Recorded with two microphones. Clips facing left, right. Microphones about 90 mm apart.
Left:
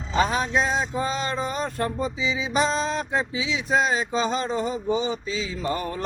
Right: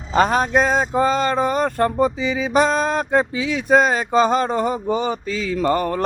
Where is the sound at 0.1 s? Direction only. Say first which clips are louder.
Right 6 dB; 50° right (ahead or behind).